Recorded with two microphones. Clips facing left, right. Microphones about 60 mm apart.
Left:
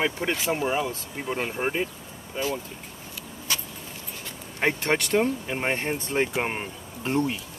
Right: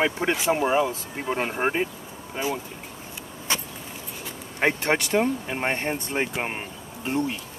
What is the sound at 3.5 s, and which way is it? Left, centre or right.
Vehicle, right.